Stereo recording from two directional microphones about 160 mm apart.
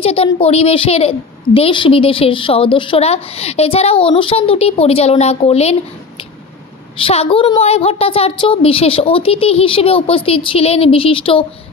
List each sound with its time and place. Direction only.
0.0 s a woman's voice: 35° left (ahead or behind)